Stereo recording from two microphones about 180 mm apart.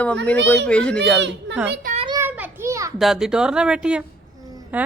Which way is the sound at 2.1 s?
10° right (ahead or behind).